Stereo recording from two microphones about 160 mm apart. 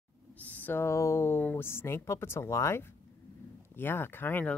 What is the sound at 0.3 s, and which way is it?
Speech, 10° left (ahead or behind).